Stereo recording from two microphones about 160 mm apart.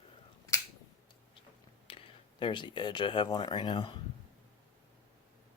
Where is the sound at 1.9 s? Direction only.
35° left (ahead or behind).